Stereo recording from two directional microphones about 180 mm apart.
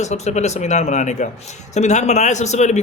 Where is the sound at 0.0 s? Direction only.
40° left (ahead or behind).